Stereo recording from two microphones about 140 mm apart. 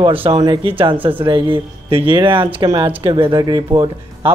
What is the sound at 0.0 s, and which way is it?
Speech, 40° right (ahead or behind).